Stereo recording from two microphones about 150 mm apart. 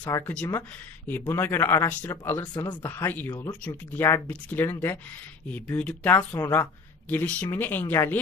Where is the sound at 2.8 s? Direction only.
15° left (ahead or behind).